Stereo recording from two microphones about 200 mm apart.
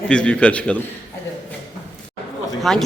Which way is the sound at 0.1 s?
5° left (ahead or behind).